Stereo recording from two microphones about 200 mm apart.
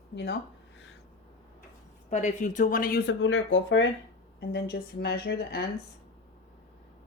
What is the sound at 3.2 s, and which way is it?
Speech, 70° left (ahead or behind).